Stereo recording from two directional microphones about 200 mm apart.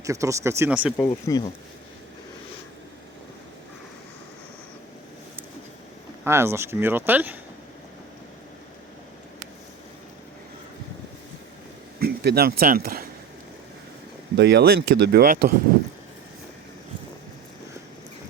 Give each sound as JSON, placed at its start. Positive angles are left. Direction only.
{"t": 0.0, "sound": "speech", "side_deg": -15}
{"t": 0.9, "sound": "speech", "side_deg": 20}
{"t": 6.2, "sound": "speech", "side_deg": -15}
{"t": 11.9, "sound": "speech", "side_deg": -50}
{"t": 14.3, "sound": "speech", "side_deg": -55}